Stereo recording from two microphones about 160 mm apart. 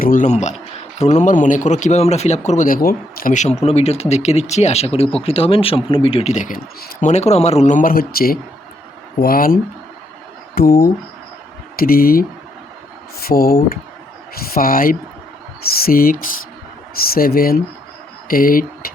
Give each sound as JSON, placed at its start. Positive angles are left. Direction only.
{"t": 0.0, "sound": "a man's voice", "side_deg": 55}